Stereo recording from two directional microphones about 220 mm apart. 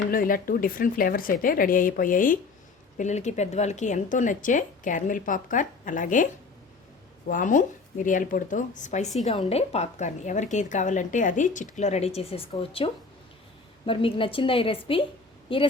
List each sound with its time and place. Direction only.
0.1 s a woman's voice: 40° left (ahead or behind)
7.3 s a woman's voice: 35° left (ahead or behind)